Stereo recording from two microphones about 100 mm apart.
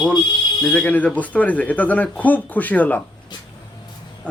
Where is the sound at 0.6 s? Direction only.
15° left (ahead or behind).